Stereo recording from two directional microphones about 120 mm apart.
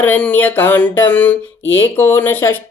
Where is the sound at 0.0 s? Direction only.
15° left (ahead or behind).